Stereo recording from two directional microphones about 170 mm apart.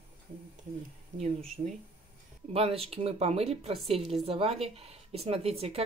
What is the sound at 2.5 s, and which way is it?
Speech, 35° right (ahead or behind).